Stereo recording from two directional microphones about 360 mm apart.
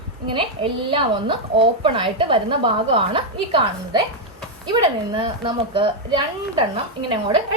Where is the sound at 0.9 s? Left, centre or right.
Centre.